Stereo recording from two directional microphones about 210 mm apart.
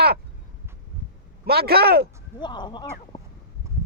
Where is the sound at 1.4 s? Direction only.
50° right (ahead or behind).